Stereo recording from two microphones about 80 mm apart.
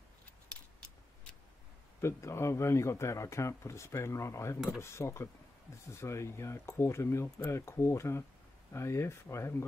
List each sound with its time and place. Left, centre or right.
2.0 s speech: left